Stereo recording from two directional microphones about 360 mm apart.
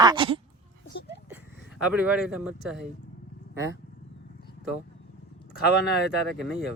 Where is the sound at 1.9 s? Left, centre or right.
Centre.